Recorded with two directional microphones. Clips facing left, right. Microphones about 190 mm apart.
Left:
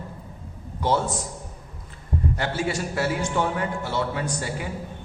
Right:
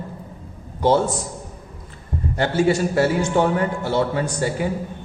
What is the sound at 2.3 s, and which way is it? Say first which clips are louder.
A man's voice: right 11 dB; 30° right (ahead or behind).